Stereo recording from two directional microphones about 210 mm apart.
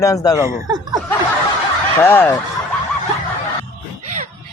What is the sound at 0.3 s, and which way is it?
Speech, 15° right (ahead or behind).